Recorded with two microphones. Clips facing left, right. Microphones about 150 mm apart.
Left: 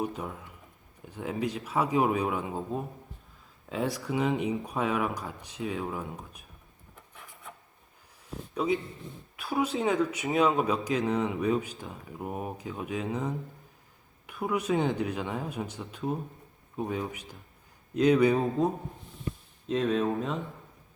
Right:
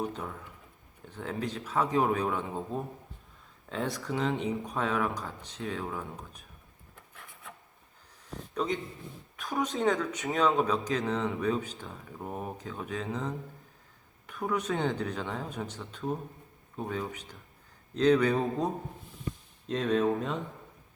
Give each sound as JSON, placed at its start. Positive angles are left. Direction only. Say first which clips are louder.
{"t": 0.0, "sound": "speech", "louder": "left 2 dB", "side_deg": 10}
{"t": 8.5, "sound": "a man's voice", "louder": "left 3 dB", "side_deg": 10}